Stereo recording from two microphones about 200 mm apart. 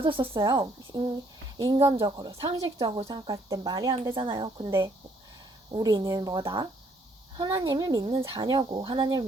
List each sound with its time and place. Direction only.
0.2 s speech: 20° right (ahead or behind)